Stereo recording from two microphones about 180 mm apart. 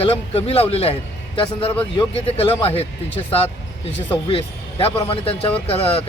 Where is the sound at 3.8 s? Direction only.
30° left (ahead or behind).